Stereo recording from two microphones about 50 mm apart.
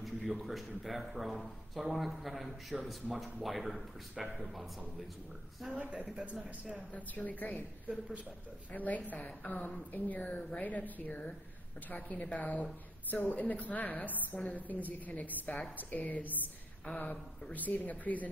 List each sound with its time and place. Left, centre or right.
0.5 s speech: centre
5.8 s speech: right
7.2 s a woman's voice: left
8.7 s a woman's voice: left